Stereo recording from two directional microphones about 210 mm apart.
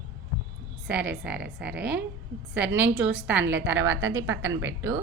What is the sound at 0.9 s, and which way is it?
A woman's voice, 5° right (ahead or behind).